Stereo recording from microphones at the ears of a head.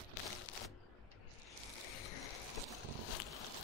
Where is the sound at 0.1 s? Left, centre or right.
Left.